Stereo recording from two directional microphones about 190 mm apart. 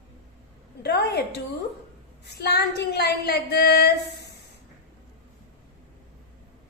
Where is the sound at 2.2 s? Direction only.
60° left (ahead or behind).